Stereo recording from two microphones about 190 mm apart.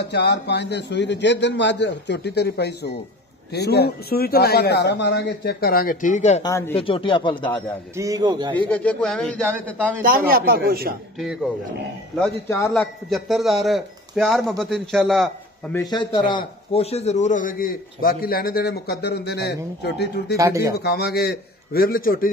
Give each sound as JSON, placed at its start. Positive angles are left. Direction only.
{"t": 0.0, "sound": "a man's voice", "side_deg": 60}
{"t": 7.9, "sound": "a man's voice", "side_deg": -15}
{"t": 8.5, "sound": "a man's voice", "side_deg": 10}
{"t": 10.0, "sound": "a man's voice", "side_deg": -50}
{"t": 12.2, "sound": "a man's voice", "side_deg": 15}
{"t": 12.6, "sound": "a man's voice", "side_deg": 0}
{"t": 15.7, "sound": "a man's voice", "side_deg": 20}
{"t": 20.3, "sound": "speech", "side_deg": -15}
{"t": 20.7, "sound": "a man's voice", "side_deg": 55}